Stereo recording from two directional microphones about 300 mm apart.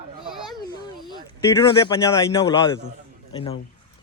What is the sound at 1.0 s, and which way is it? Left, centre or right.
A man's voice, centre.